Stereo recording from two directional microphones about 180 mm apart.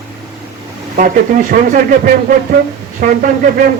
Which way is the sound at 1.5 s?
50° right (ahead or behind).